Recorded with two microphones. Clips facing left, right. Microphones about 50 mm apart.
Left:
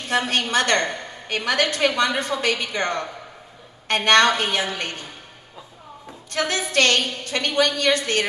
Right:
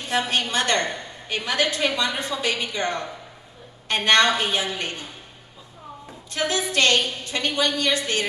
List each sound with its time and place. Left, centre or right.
0.0 s a woman's voice: left
6.3 s a woman's voice: left